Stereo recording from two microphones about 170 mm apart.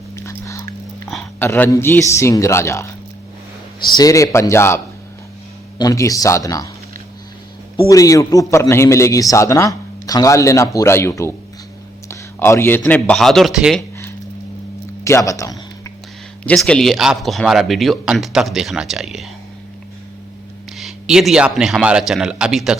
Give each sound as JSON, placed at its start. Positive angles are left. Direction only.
{"t": 0.2, "sound": "dog", "side_deg": 15}
{"t": 1.4, "sound": "a man's voice", "side_deg": 10}
{"t": 3.9, "sound": "a man's voice", "side_deg": 20}
{"t": 7.9, "sound": "a man's voice", "side_deg": 20}
{"t": 15.0, "sound": "a man's voice", "side_deg": 20}
{"t": 16.4, "sound": "speech", "side_deg": 5}
{"t": 20.7, "sound": "speech", "side_deg": 0}